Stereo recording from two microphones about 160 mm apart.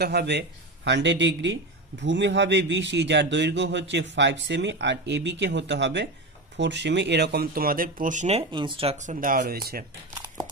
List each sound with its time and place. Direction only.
0.0 s speech: 90° right; by 8.9 s 35° right (ahead or behind)
8.9 s speech: 50° right (ahead or behind); by 9.8 s 70° right (ahead or behind)
10.2 s crumpling: 25° right (ahead or behind)